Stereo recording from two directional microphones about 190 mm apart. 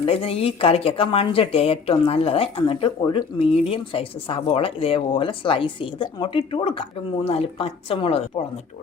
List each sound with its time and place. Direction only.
0.0 s speech: 30° left (ahead or behind)